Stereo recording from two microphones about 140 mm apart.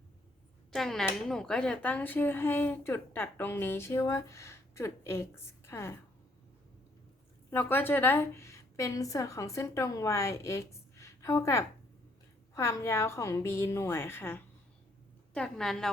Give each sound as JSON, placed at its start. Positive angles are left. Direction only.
{"t": 0.7, "sound": "a woman's voice", "side_deg": 0}
{"t": 7.5, "sound": "a woman's voice", "side_deg": 15}
{"t": 15.3, "sound": "a woman's voice", "side_deg": 5}